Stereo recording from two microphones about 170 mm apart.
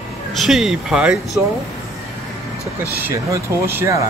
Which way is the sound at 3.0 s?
15° right (ahead or behind).